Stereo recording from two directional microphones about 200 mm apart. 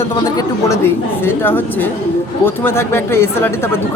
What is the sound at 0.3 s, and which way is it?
A woman's voice, 15° left (ahead or behind).